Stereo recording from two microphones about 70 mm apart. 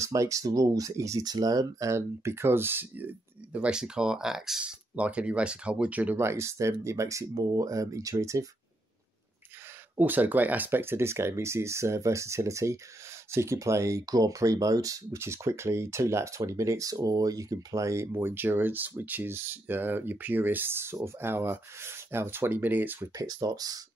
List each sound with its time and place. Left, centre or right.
0.0 s speech: right
1.2 s speech: right
3.5 s speech: centre
6.1 s speech: right
9.9 s speech: right
15.1 s speech: right
18.1 s speech: right
23.1 s speech: right